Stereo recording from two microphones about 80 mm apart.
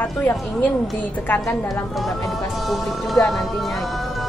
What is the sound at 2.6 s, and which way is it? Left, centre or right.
Music, centre.